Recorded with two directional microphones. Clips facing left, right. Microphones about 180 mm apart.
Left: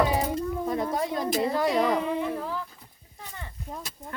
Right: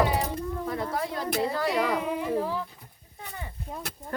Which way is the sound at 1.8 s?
10° right (ahead or behind).